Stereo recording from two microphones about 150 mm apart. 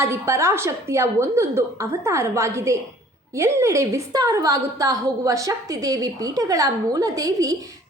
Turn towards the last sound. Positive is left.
turn(degrees=-25)  # may be behind; listen again after turning